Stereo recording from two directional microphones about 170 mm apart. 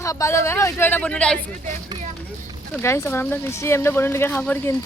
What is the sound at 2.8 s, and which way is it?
Speech, 15° left (ahead or behind).